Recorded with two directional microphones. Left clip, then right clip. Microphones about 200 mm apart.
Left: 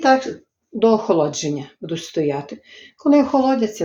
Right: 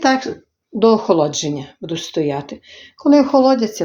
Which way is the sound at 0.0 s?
35° right (ahead or behind).